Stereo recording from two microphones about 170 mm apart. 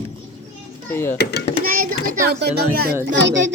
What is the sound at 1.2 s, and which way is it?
Speech, 75° left (ahead or behind).